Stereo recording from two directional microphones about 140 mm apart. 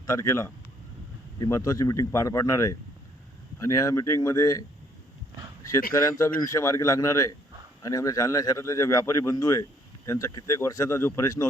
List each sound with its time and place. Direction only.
0.0 s a man's voice: 25° left (ahead or behind)
5.9 s a man's voice: 25° left (ahead or behind)